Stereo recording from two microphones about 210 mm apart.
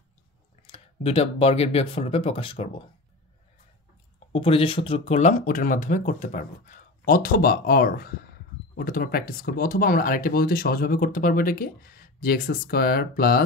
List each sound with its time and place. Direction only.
0.7 s speech: 30° left (ahead or behind)
4.3 s speech: 25° left (ahead or behind); by 13.4 s 45° left (ahead or behind)